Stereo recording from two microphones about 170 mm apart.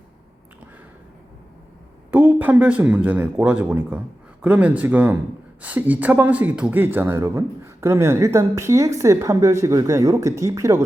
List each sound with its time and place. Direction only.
2.0 s speech: 10° right (ahead or behind)